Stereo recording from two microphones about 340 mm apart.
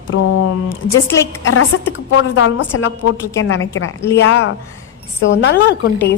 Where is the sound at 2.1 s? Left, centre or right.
Left.